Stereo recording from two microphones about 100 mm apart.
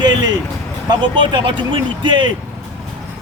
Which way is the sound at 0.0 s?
45° right (ahead or behind).